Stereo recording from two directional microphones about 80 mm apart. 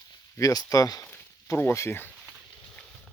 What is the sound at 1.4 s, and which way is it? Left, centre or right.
Speech, left.